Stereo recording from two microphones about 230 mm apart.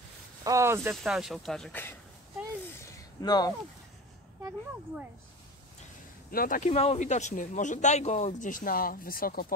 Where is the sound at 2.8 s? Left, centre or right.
Centre.